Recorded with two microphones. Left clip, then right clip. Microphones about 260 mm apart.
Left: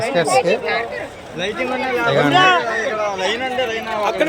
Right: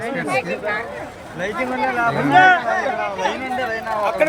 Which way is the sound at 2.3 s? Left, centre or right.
Centre.